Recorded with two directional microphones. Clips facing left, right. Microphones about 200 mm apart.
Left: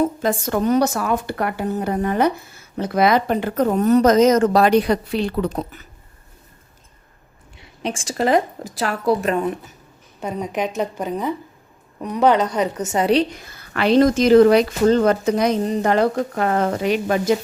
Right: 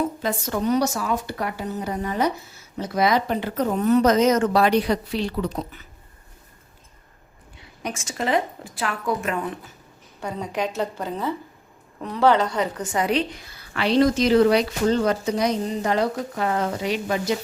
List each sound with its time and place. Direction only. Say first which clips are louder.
0.0 s speech: left 5 dB; 45° left (ahead or behind)
7.8 s a woman's voice: left 6 dB; 30° left (ahead or behind)
10.2 s a woman's voice: left 3 dB; 20° left (ahead or behind)
13.4 s speech: left 5 dB; 50° left (ahead or behind)